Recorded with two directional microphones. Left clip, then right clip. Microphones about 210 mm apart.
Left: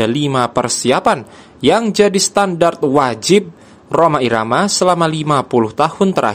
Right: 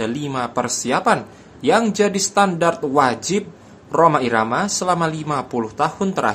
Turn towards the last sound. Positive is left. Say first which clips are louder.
# left 6 dB
turn(degrees=40)  # may be behind; listen again after turning